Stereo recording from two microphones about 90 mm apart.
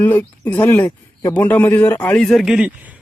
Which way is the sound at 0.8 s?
50° left (ahead or behind).